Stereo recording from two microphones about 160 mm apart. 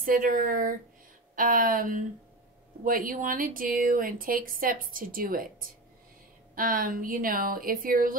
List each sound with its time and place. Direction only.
0.0 s speech: 60° right (ahead or behind)
6.5 s speech: 65° right (ahead or behind)